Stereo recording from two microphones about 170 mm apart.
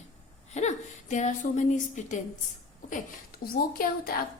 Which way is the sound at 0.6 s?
45° left (ahead or behind).